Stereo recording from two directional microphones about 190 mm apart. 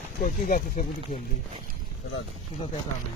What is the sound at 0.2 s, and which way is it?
Speech, 45° left (ahead or behind).